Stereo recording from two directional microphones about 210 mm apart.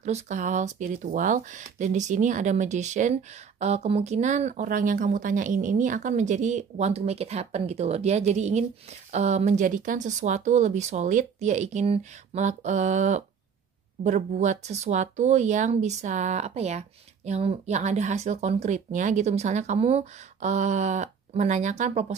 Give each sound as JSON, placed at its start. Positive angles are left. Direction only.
{"t": 0.0, "sound": "speech", "side_deg": -35}